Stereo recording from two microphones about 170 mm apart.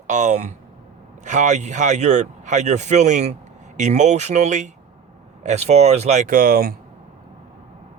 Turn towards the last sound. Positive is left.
turn(degrees=-60)  # may be behind; listen again after turning